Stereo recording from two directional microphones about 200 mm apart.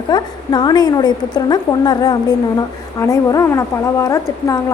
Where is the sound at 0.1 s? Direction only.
20° left (ahead or behind).